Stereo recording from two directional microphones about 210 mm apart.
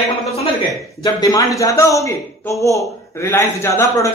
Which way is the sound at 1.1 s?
15° left (ahead or behind).